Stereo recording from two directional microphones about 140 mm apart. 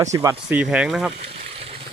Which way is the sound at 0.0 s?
25° right (ahead or behind).